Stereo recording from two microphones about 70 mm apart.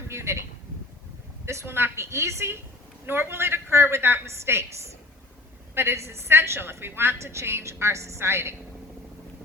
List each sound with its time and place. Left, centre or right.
0.1 s speech: right
1.5 s a woman's voice: right
5.7 s a woman's voice: right